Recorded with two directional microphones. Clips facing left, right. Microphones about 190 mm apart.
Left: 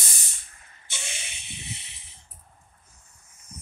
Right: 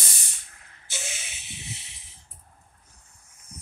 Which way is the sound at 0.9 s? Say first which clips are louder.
Right 2 dB; centre (ahead or behind).